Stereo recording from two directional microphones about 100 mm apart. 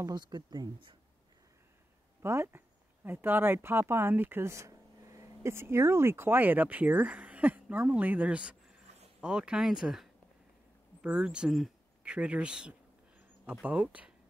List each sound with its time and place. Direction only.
0.0 s speech: 45° right (ahead or behind)
2.2 s speech: 25° right (ahead or behind)